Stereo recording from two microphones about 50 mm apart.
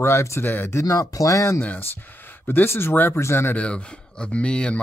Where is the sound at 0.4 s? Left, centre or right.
Left.